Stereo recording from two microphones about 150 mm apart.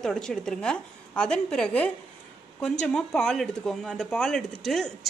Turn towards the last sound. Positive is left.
turn(degrees=0)  # may be behind; listen again after turning